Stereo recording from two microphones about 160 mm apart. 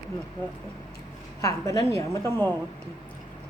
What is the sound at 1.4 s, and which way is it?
A woman's voice, 20° left (ahead or behind).